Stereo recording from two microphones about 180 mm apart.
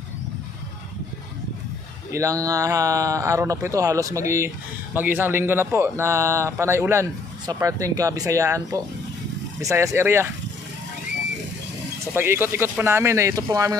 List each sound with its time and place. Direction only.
2.1 s a man's voice: 15° right (ahead or behind)
12.1 s a man's voice: 10° right (ahead or behind)